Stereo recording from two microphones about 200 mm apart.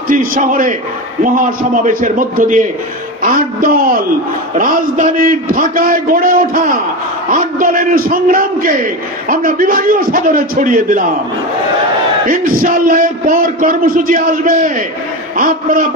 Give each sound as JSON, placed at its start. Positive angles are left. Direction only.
{"t": 0.1, "sound": "a man's voice", "side_deg": -45}
{"t": 12.3, "sound": "a man's voice", "side_deg": -45}